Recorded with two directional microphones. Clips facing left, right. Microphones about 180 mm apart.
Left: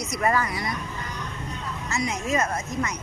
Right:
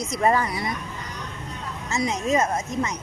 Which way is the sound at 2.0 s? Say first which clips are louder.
Right 3 dB; 20° right (ahead or behind).